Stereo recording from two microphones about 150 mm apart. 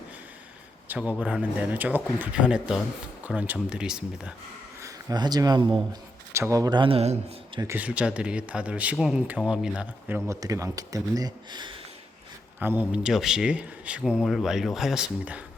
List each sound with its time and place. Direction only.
0.9 s speech: 10° right (ahead or behind)
4.8 s speech: 20° right (ahead or behind); by 7.6 s 45° right (ahead or behind)
7.6 s speech: 15° right (ahead or behind)
10.2 s speech: 20° right (ahead or behind)
12.5 s speech: 10° right (ahead or behind)